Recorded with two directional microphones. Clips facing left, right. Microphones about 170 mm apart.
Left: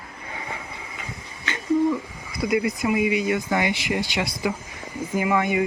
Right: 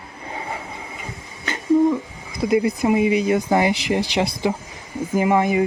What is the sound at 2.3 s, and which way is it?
Speech, 30° right (ahead or behind).